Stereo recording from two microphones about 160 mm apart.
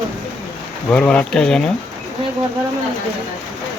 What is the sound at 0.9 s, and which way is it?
Speech, 5° left (ahead or behind).